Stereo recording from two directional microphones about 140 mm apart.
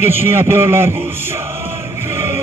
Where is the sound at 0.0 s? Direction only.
15° right (ahead or behind).